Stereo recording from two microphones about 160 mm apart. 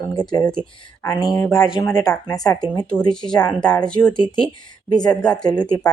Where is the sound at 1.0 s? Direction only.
25° left (ahead or behind).